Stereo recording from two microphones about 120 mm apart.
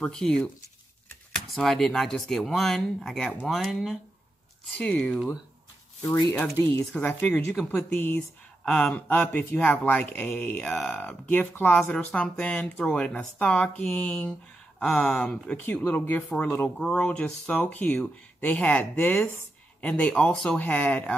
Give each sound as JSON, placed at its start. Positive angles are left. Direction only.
{"t": 0.0, "sound": "speech", "side_deg": 5}
{"t": 1.5, "sound": "speech", "side_deg": 5}
{"t": 6.0, "sound": "speech", "side_deg": 30}